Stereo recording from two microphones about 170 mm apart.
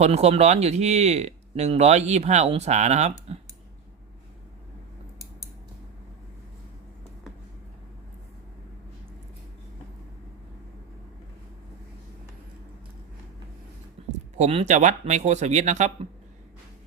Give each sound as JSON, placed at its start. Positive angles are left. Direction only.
{"t": 0.0, "sound": "speech", "side_deg": -40}
{"t": 14.3, "sound": "speech", "side_deg": -40}